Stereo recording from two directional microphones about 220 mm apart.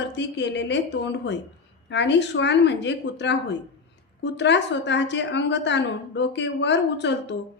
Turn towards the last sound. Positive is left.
turn(degrees=50)  # may be behind; listen again after turning